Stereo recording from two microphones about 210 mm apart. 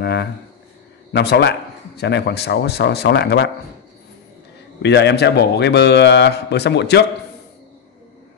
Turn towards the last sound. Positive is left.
turn(degrees=55)  # may be behind; listen again after turning